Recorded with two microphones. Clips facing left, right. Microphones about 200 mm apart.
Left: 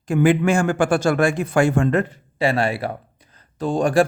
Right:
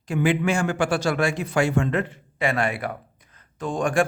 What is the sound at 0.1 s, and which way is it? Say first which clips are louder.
Speech: left 5 dB; 50° left (ahead or behind).